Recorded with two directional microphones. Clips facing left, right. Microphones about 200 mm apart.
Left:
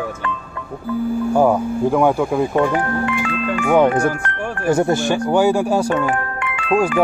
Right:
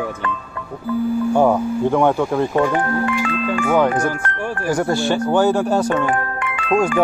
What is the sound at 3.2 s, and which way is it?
Speech, 40° right (ahead or behind).